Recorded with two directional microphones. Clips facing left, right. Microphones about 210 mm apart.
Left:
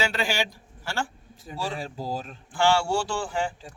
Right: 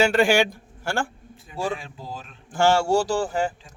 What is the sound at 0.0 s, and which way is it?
A man's voice, 50° right (ahead or behind).